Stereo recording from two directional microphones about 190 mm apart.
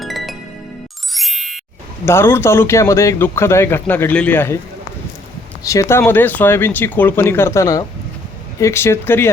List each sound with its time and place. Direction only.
0.0 s music: centre (ahead or behind)
1.1 s ding: centre (ahead or behind)
2.0 s speech: 15° left (ahead or behind)
5.6 s speech: 15° left (ahead or behind)